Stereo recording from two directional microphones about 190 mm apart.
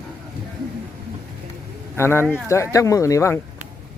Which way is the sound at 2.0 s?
10° left (ahead or behind).